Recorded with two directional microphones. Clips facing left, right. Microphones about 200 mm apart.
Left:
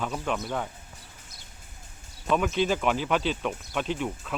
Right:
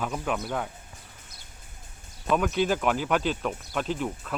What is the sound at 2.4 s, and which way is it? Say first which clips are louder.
Speech: even; centre (ahead or behind).